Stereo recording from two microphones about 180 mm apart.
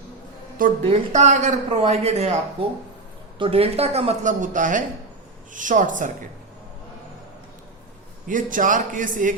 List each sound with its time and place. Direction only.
0.9 s a man's voice: 40° right (ahead or behind)
8.3 s a man's voice: 45° right (ahead or behind)